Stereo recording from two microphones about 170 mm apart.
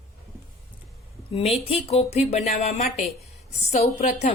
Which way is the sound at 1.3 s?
40° left (ahead or behind).